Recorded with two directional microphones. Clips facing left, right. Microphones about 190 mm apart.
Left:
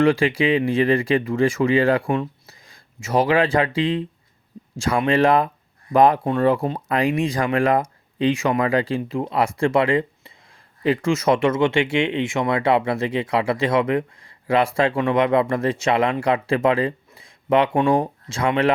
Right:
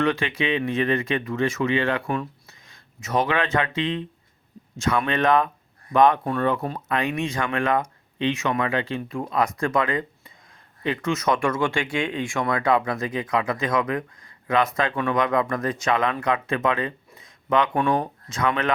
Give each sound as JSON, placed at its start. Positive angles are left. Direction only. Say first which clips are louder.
{"t": 0.0, "sound": "speech", "louder": "left 6 dB", "side_deg": 30}